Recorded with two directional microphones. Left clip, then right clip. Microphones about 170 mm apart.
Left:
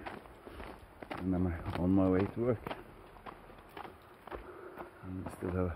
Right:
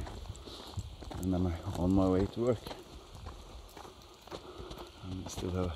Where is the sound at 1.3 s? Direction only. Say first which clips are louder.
Right 1 dB; 30° right (ahead or behind).